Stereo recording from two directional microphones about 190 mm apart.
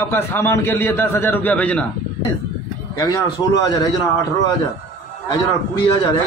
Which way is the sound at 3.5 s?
20° left (ahead or behind).